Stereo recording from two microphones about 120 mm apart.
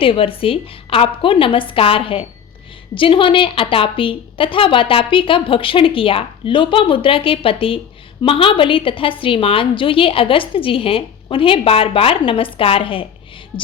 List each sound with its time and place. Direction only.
0.0 s a woman's voice: 50° left (ahead or behind)